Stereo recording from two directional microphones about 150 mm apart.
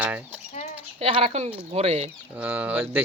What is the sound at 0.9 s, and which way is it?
Speech, 40° right (ahead or behind).